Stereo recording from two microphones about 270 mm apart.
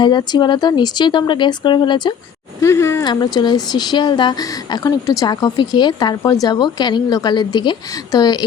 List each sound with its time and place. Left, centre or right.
0.0 s speech: centre